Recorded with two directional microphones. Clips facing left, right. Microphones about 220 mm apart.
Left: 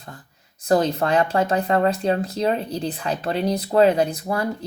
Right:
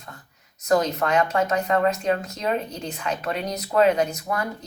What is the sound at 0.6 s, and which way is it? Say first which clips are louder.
Speech: left 2 dB; 30° left (ahead or behind).